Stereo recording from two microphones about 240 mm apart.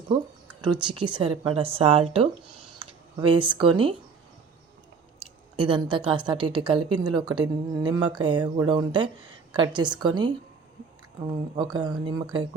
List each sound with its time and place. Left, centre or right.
0.6 s speech: centre
5.5 s speech: right
11.5 s speech: centre